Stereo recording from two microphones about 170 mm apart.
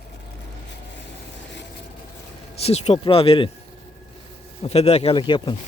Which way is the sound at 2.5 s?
35° left (ahead or behind).